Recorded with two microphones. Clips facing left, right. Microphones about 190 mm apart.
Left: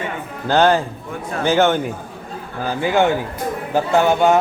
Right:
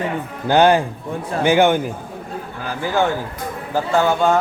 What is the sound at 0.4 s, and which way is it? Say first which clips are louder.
A man's voice: right 1 dB; 15° right (ahead or behind).